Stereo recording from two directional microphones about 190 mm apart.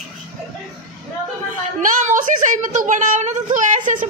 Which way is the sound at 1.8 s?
40° right (ahead or behind).